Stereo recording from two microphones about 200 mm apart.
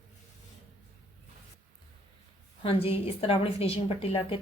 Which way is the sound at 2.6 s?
30° left (ahead or behind).